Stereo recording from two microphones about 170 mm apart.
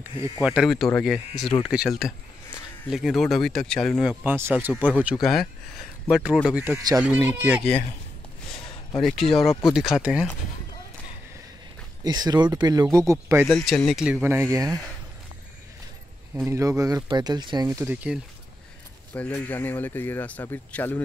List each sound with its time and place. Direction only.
0.2 s speech: 5° right (ahead or behind)
5.2 s speech: centre (ahead or behind)
8.5 s a sound: 30° left (ahead or behind)
9.0 s speech: centre (ahead or behind)
12.0 s speech: 25° right (ahead or behind)
13.5 s speech: 5° left (ahead or behind)
14.2 s speech: 15° right (ahead or behind)
16.4 s speech: 20° right (ahead or behind)
19.1 s speech: 10° left (ahead or behind)